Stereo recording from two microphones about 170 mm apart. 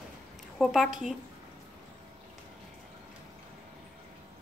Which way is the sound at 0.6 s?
Centre (ahead or behind).